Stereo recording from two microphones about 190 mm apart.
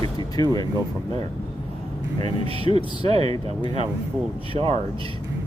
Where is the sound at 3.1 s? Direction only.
35° right (ahead or behind).